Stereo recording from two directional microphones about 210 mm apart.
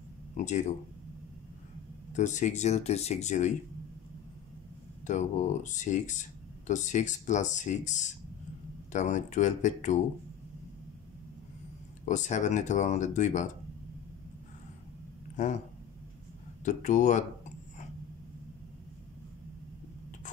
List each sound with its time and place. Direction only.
0.4 s speech: 35° left (ahead or behind)
2.1 s speech: 35° left (ahead or behind)
5.0 s speech: 35° left (ahead or behind)
12.1 s speech: 35° left (ahead or behind)
15.4 s speech: 35° left (ahead or behind)
16.6 s speech: 35° left (ahead or behind)